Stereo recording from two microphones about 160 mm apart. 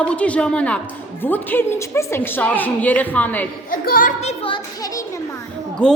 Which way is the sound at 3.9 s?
55° left (ahead or behind).